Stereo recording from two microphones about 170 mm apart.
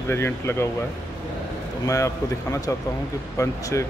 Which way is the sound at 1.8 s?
20° left (ahead or behind).